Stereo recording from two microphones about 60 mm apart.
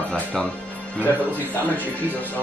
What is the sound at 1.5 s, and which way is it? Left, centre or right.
Speech, left.